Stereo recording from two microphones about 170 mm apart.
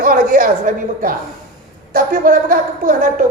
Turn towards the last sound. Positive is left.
turn(degrees=-55)  # may be behind; listen again after turning